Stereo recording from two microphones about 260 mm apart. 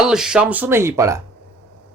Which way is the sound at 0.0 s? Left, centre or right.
Centre.